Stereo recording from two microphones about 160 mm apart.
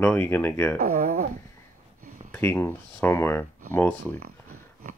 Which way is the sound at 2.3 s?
15° left (ahead or behind).